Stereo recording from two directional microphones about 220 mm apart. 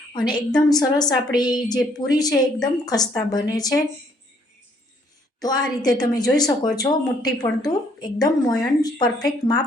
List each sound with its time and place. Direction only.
0.1 s a woman's voice: 20° left (ahead or behind)
5.4 s a woman's voice: 20° left (ahead or behind)